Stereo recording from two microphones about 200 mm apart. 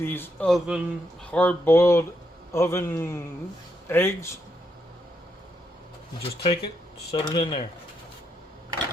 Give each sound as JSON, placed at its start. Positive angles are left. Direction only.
{"t": 0.0, "sound": "a man's voice", "side_deg": 10}
{"t": 6.2, "sound": "speech", "side_deg": 30}